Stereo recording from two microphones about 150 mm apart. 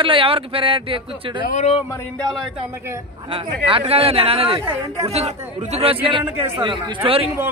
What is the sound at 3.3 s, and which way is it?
Speech, 35° right (ahead or behind).